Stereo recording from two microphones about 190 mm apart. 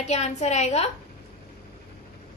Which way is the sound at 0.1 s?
35° left (ahead or behind).